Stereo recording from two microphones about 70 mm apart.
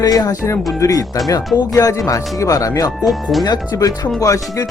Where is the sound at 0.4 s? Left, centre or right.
Left.